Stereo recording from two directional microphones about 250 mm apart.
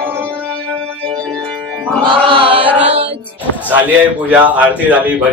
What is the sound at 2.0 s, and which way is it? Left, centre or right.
Chant, right.